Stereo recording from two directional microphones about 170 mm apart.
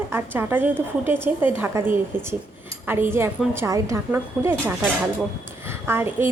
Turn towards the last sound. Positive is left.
turn(degrees=-15)  # may be behind; listen again after turning